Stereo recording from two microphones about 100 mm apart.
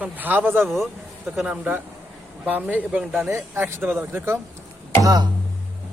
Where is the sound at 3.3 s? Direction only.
25° right (ahead or behind).